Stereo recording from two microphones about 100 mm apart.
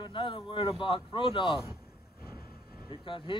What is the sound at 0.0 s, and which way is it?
Speech, 55° left (ahead or behind).